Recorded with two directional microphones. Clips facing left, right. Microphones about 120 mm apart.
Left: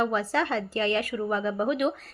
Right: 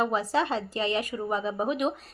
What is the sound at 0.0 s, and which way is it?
A woman's voice, 15° right (ahead or behind).